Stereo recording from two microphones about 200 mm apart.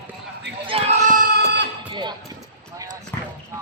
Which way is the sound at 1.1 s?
55° right (ahead or behind).